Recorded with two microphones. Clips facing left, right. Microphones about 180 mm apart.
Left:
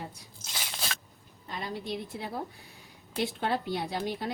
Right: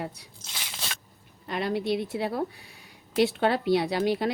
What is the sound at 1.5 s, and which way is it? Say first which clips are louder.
Speech: right 8 dB; 75° right (ahead or behind).